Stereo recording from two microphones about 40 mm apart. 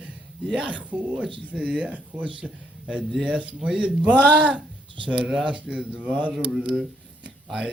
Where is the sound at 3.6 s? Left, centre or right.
Right.